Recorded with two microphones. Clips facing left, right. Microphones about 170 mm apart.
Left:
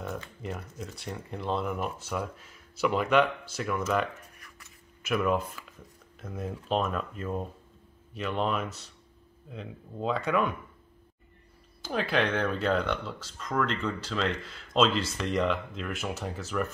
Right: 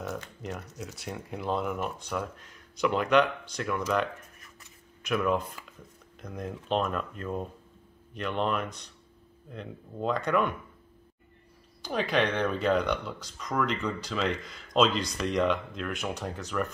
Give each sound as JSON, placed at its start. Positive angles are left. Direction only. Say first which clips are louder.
{"t": 0.0, "sound": "typing", "louder": "even", "side_deg": 0}
{"t": 0.9, "sound": "speech", "louder": "right 1 dB", "side_deg": 0}
{"t": 5.0, "sound": "speech", "louder": "even", "side_deg": 0}
{"t": 11.8, "sound": "speech", "louder": "right 1 dB", "side_deg": 5}